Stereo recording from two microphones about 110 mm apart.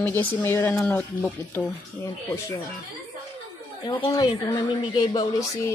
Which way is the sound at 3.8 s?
35° left (ahead or behind).